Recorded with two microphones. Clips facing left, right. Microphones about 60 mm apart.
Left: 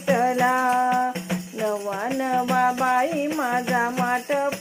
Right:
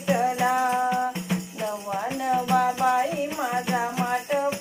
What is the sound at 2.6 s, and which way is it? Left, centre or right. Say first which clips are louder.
Music: left 3 dB; left.